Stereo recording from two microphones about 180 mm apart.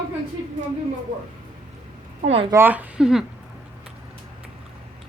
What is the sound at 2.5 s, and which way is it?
Speech, 10° right (ahead or behind).